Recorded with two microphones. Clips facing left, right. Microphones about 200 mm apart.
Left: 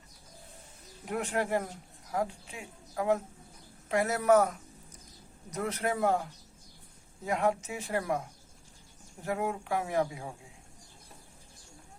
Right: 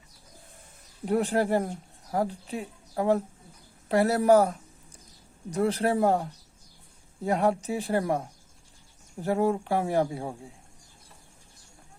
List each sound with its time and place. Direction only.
1.0 s speech: 35° right (ahead or behind)
7.3 s speech: 35° right (ahead or behind)